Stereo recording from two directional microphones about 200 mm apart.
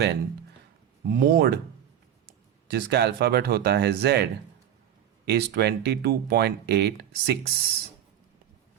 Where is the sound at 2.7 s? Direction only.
55° right (ahead or behind).